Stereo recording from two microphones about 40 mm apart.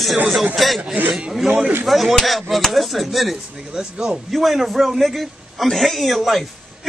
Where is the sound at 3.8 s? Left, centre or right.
Right.